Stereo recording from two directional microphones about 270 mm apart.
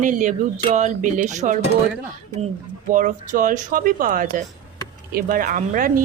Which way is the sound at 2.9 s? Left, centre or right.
Right.